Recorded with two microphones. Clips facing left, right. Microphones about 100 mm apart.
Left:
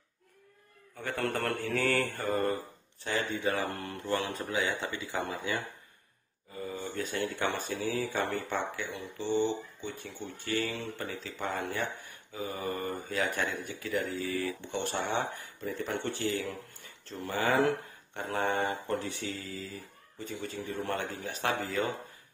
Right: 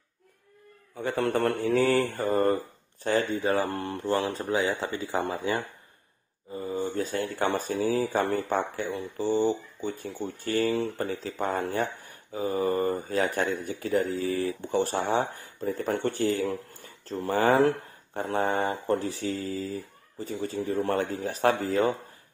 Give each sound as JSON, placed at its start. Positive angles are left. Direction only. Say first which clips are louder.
{"t": 0.9, "sound": "speech", "louder": "right 6 dB", "side_deg": -20}
{"t": 2.2, "sound": "speech", "louder": "right 6 dB", "side_deg": -40}
{"t": 6.5, "sound": "speech", "louder": "right 7 dB", "side_deg": -30}